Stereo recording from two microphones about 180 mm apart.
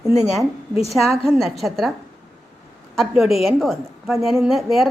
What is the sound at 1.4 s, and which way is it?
Speech, centre (ahead or behind).